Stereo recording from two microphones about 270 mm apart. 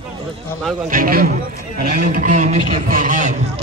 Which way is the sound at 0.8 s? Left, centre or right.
Right.